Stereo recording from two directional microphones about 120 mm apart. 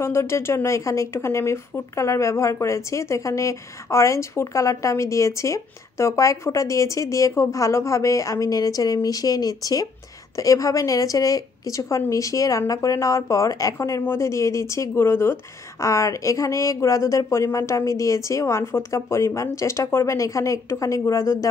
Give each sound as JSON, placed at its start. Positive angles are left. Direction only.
{"t": 0.0, "sound": "speech", "side_deg": 20}